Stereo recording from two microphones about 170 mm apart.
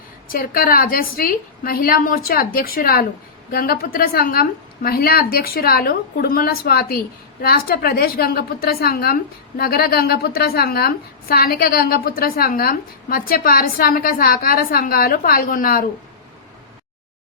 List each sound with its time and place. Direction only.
0.3 s a woman's voice: 60° left (ahead or behind)